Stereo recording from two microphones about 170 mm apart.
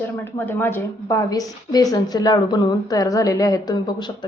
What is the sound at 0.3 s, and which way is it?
A woman's voice, 15° left (ahead or behind).